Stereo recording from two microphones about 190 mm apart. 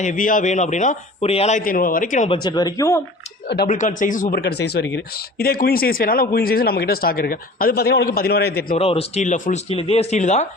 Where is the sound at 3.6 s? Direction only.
40° left (ahead or behind).